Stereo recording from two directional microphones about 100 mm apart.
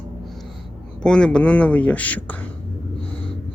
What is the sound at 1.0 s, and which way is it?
Speech, 5° left (ahead or behind).